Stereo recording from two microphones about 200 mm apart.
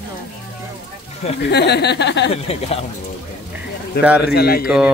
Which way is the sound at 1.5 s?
55° left (ahead or behind).